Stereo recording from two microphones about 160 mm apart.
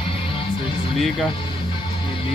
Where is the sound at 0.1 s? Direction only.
35° left (ahead or behind).